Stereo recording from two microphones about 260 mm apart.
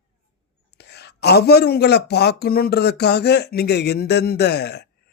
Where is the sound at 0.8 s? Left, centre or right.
Left.